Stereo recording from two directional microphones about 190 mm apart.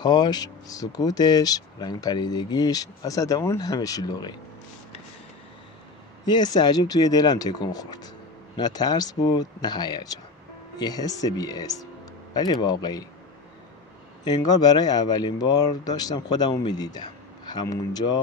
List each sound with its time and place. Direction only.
0.0 s speech: 20° left (ahead or behind)
6.2 s speech: 20° left (ahead or behind)
14.2 s speech: 20° left (ahead or behind)